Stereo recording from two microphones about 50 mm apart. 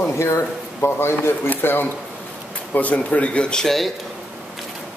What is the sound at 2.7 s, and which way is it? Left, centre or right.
Speech, left.